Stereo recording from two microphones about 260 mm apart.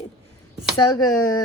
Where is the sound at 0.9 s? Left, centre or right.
Left.